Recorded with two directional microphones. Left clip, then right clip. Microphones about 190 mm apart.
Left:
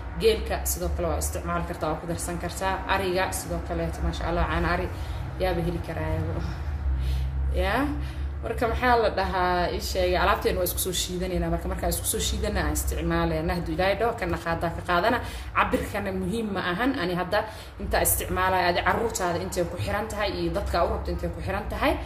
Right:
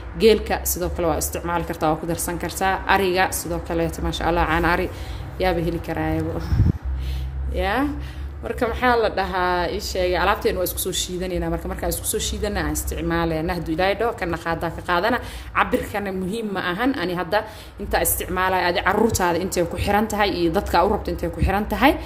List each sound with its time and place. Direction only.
0.2 s a woman's voice: 45° right (ahead or behind)
7.5 s a woman's voice: 50° right (ahead or behind)